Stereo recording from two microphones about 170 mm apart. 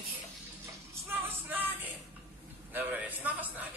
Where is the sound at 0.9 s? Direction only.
10° right (ahead or behind).